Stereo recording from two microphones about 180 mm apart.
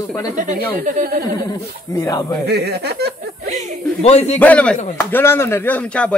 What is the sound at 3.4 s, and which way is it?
Speech, 40° right (ahead or behind).